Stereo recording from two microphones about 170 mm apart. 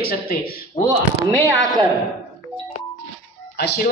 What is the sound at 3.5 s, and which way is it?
Music, 75° left (ahead or behind).